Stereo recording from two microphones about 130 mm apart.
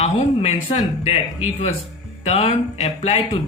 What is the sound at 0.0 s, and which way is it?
Speech, 55° left (ahead or behind).